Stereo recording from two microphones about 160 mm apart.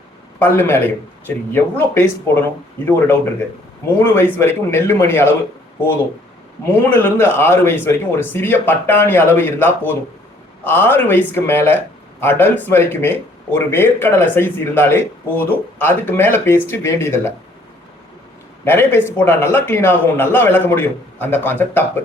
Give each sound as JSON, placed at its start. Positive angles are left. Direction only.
{"t": 0.3, "sound": "speech", "side_deg": 10}
{"t": 4.0, "sound": "speech", "side_deg": 15}
{"t": 6.7, "sound": "speech", "side_deg": 15}
{"t": 18.6, "sound": "speech", "side_deg": 15}